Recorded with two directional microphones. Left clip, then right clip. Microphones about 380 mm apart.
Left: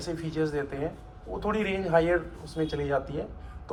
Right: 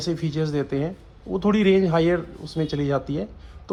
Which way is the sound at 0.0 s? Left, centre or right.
Centre.